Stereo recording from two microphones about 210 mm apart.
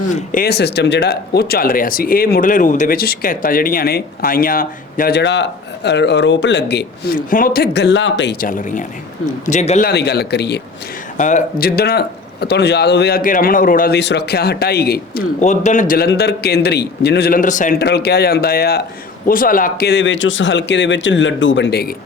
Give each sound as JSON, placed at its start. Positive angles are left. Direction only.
{"t": 0.3, "sound": "speech", "side_deg": 45}
{"t": 7.3, "sound": "speech", "side_deg": 40}
{"t": 9.9, "sound": "speech", "side_deg": 50}
{"t": 11.2, "sound": "speech", "side_deg": 35}
{"t": 11.6, "sound": "speech", "side_deg": 50}